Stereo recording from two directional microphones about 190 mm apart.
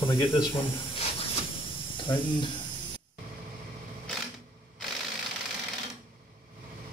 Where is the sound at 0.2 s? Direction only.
25° left (ahead or behind).